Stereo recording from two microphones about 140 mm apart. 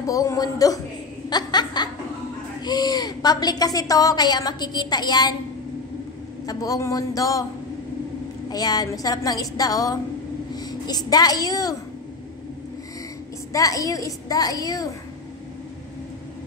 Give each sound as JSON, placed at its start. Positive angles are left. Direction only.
{"t": 0.0, "sound": "a woman's voice", "side_deg": 25}
{"t": 1.3, "sound": "laughter", "side_deg": 30}
{"t": 2.6, "sound": "a woman's voice", "side_deg": 30}
{"t": 6.4, "sound": "a woman's voice", "side_deg": 25}
{"t": 8.5, "sound": "a woman's voice", "side_deg": 30}
{"t": 13.5, "sound": "a woman's voice", "side_deg": 25}